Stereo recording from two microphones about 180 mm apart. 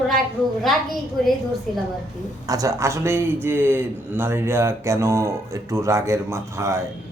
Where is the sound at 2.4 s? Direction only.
20° right (ahead or behind).